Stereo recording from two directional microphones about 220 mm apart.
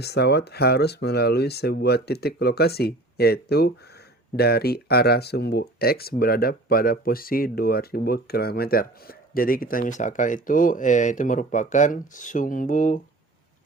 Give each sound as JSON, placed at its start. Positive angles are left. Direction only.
{"t": 0.0, "sound": "speech", "side_deg": 50}